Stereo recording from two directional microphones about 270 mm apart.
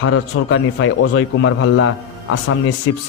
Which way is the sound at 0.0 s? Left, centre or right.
Left.